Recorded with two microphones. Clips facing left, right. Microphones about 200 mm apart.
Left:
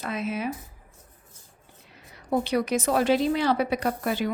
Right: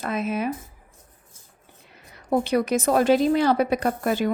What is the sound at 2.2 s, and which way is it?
Speech, 50° right (ahead or behind).